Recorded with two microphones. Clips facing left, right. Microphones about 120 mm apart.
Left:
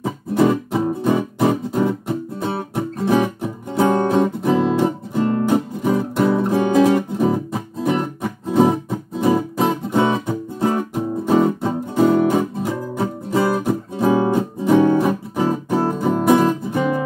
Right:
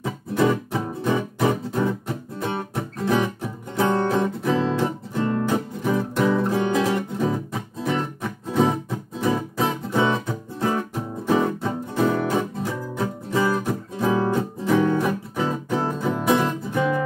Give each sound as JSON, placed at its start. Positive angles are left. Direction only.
{"t": 0.0, "sound": "music", "side_deg": 20}
{"t": 6.8, "sound": "music", "side_deg": 20}
{"t": 9.8, "sound": "music", "side_deg": 15}